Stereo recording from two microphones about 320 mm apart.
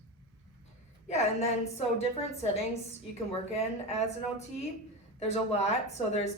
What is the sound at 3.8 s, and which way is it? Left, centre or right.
A woman's voice, centre.